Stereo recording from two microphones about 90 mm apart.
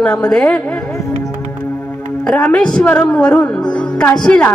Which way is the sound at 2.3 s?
15° left (ahead or behind).